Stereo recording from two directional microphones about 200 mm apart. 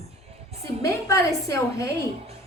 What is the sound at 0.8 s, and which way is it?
A woman's voice, 15° left (ahead or behind).